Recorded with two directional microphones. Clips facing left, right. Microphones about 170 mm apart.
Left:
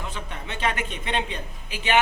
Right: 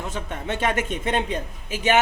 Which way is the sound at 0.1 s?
45° right (ahead or behind).